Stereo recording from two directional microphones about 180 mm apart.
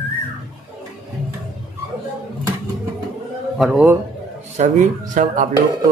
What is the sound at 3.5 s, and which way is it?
Speech, 5° right (ahead or behind).